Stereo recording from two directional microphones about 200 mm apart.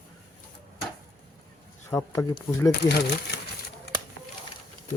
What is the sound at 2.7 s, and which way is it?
Speech, 55° left (ahead or behind).